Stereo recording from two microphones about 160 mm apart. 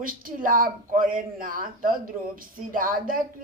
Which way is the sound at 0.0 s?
60° right (ahead or behind).